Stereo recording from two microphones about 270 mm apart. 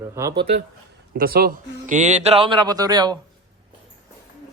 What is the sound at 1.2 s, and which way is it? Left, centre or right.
A man's voice, right.